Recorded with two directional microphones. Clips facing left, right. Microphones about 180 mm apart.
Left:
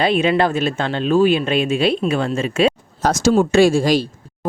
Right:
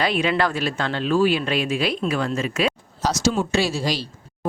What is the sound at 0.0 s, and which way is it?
Speech, 25° left (ahead or behind).